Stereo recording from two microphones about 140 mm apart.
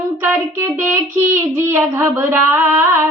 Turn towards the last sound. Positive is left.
turn(degrees=-20)  # may be behind; listen again after turning